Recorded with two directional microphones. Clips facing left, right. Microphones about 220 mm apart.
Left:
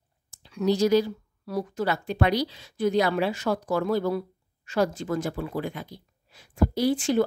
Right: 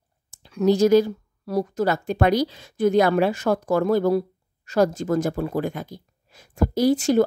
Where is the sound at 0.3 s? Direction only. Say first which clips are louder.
Right 5 dB; 45° right (ahead or behind).